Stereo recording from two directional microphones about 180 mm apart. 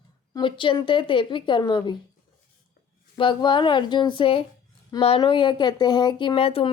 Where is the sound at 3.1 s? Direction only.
25° left (ahead or behind).